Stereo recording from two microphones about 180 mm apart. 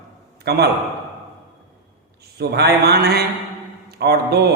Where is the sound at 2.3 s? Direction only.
65° right (ahead or behind).